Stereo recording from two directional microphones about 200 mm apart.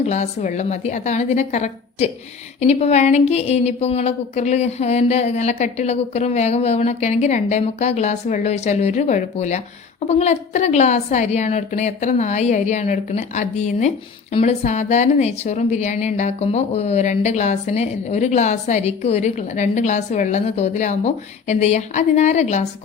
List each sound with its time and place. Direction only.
0.0 s a woman's voice: 35° left (ahead or behind)